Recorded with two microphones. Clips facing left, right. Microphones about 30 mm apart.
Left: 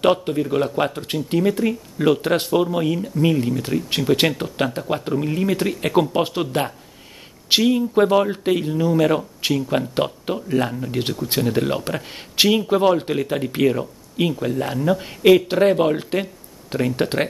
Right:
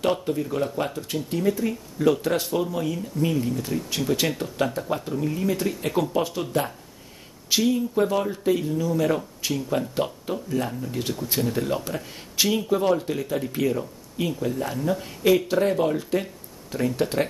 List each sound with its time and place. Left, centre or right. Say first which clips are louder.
0.0 s speech: left 6 dB; left
7.4 s speech: left 5 dB; left
9.5 s speech: left 5 dB; left
9.8 s speech: left 4 dB; left